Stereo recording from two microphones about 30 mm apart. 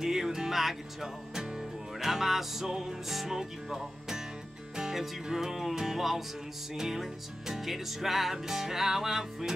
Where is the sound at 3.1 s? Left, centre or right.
Centre.